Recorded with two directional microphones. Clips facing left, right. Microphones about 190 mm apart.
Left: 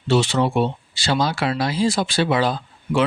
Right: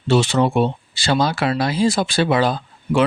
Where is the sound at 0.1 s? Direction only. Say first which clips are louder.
Right 2 dB; 50° right (ahead or behind).